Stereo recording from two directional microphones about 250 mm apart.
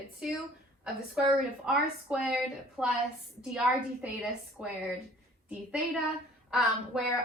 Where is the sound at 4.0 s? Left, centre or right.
Centre.